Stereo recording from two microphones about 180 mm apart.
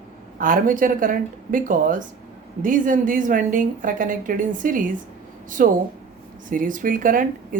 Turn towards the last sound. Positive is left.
turn(degrees=-50)  # may be behind; listen again after turning